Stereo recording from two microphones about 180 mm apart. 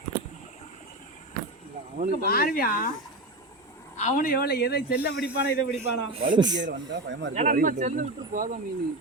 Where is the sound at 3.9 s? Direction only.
45° left (ahead or behind); by 4.9 s 60° left (ahead or behind).